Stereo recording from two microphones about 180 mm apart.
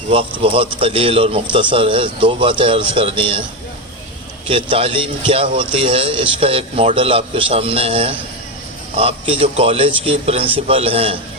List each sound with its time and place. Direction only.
0.1 s speech: 30° right (ahead or behind)
4.4 s speech: 30° right (ahead or behind)